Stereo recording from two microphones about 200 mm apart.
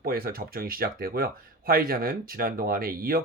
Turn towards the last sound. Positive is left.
turn(degrees=-45)  # may be behind; listen again after turning